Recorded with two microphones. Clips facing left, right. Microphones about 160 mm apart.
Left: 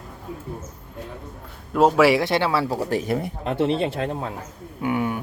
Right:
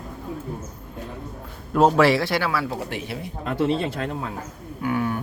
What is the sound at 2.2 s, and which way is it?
Speech, 25° left (ahead or behind).